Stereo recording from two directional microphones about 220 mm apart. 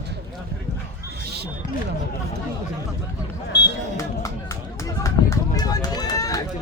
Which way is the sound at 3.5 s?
50° left (ahead or behind).